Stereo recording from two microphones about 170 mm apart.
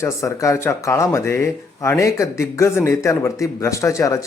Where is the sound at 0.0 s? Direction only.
20° left (ahead or behind).